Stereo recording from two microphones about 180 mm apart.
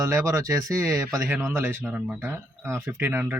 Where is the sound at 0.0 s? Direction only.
15° right (ahead or behind).